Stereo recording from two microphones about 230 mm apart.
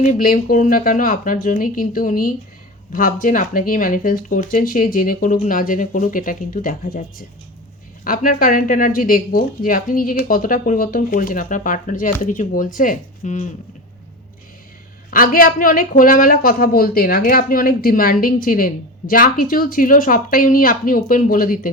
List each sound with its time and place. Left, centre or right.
0.0 s a woman's voice: left
15.1 s a woman's voice: left